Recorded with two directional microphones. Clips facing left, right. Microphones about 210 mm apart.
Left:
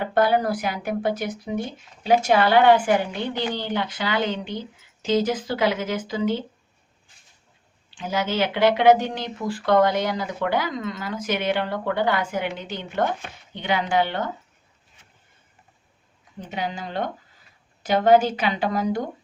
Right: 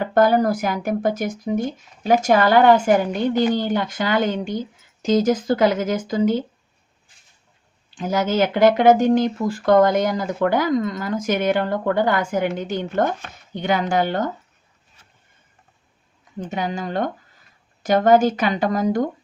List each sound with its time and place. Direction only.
0.0 s speech: 45° right (ahead or behind)
7.9 s speech: 45° right (ahead or behind)
16.4 s speech: 45° right (ahead or behind)